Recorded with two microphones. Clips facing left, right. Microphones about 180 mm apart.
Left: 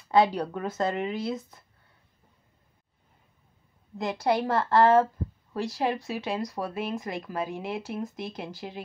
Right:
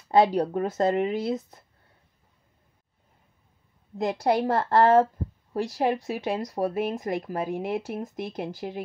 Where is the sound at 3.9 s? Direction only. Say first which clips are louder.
Right 2 dB; 40° right (ahead or behind).